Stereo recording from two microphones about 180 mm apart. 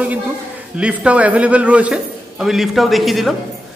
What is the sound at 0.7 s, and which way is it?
A man's voice, 5° right (ahead or behind).